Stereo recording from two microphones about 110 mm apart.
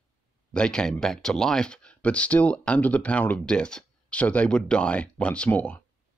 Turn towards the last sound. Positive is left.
turn(degrees=15)  # may be behind; listen again after turning